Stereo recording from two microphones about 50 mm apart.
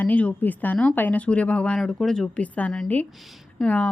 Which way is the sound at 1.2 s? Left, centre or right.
Left.